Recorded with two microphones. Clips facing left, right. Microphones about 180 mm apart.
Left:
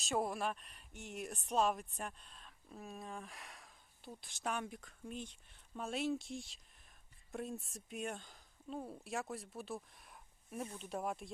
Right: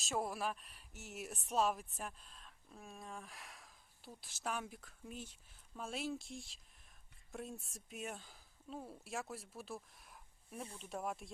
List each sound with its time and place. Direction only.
0.0 s speech: centre (ahead or behind)
10.6 s speech: 30° left (ahead or behind)
10.8 s speech: centre (ahead or behind)